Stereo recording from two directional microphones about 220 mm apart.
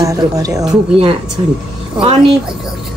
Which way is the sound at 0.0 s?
15° right (ahead or behind).